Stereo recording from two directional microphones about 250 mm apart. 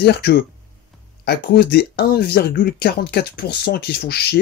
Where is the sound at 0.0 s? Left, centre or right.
Left.